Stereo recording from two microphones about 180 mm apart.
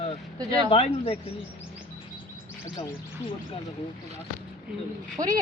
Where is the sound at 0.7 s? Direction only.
30° left (ahead or behind).